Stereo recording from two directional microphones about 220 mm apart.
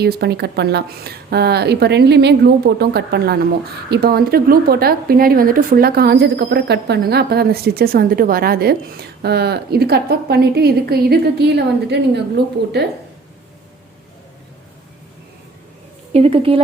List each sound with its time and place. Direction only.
0.0 s speech: 45° right (ahead or behind)
16.1 s a woman's voice: 25° right (ahead or behind)